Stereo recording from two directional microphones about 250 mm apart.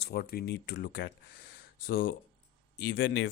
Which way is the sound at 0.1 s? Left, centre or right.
Left.